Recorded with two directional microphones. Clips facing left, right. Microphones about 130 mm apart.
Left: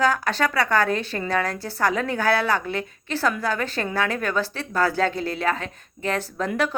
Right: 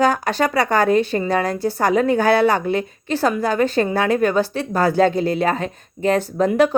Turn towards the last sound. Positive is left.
turn(degrees=-15)  # may be behind; listen again after turning